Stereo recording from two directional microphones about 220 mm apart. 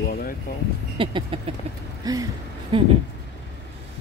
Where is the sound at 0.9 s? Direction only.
25° right (ahead or behind).